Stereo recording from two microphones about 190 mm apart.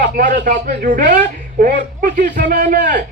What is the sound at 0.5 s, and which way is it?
A man's voice, 50° right (ahead or behind).